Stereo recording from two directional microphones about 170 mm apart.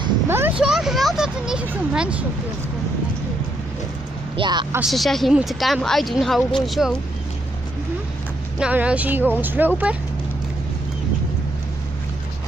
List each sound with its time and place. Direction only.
0.3 s speech: 15° right (ahead or behind)
0.7 s speech: centre (ahead or behind)
4.4 s speech: 25° right (ahead or behind)
4.7 s speech: centre (ahead or behind)
8.5 s a woman's voice: 5° right (ahead or behind)